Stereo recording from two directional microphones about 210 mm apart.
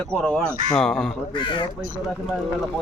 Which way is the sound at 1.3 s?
20° left (ahead or behind).